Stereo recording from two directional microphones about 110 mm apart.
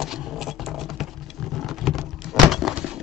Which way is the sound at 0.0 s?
5° right (ahead or behind).